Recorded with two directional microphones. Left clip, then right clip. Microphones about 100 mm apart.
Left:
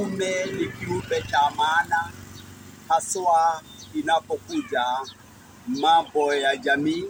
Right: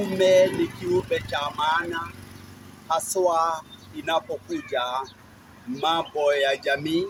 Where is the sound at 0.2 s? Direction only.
40° right (ahead or behind).